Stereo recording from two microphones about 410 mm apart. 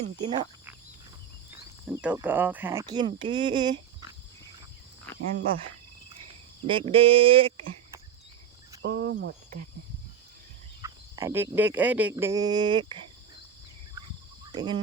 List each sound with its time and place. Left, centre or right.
0.0 s speech: centre
1.9 s cricket: centre
6.7 s cricket: centre
8.8 s speech: right
10.8 s cricket: centre
14.5 s a sound: centre